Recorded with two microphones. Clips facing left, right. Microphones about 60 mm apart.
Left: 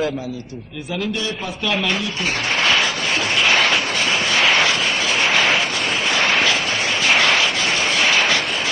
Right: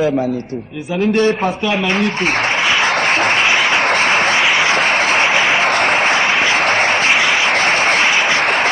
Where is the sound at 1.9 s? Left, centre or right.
Right.